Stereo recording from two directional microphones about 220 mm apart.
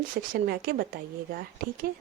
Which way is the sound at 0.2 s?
40° right (ahead or behind).